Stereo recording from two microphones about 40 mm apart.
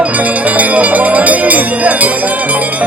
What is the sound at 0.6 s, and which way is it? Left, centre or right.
Music, right.